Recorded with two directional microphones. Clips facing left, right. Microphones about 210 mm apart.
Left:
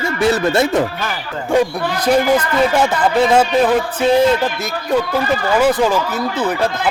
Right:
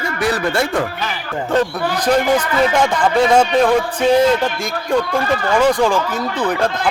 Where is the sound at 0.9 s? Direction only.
50° left (ahead or behind).